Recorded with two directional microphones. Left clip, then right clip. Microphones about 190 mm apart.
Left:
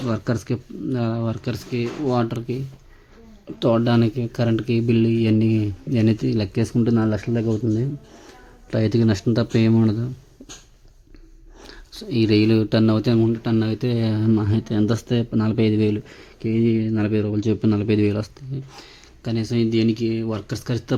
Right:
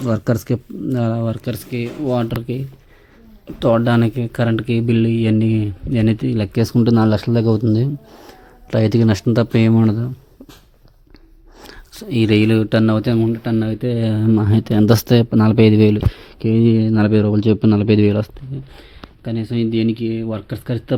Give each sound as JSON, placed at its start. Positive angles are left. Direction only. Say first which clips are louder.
{"t": 0.0, "sound": "speech", "louder": "right 5 dB", "side_deg": -15}
{"t": 6.5, "sound": "speech", "louder": "right 5 dB", "side_deg": -15}
{"t": 8.7, "sound": "speech", "louder": "right 4 dB", "side_deg": -10}
{"t": 11.6, "sound": "speech", "louder": "right 2 dB", "side_deg": -5}
{"t": 14.8, "sound": "speech", "louder": "right 9 dB", "side_deg": -30}
{"t": 18.8, "sound": "speech", "louder": "right 2 dB", "side_deg": 5}